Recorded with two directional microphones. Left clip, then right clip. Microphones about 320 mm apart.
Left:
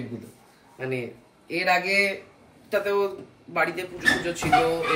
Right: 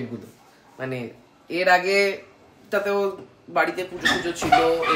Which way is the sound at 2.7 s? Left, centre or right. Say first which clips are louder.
Right 1 dB; centre.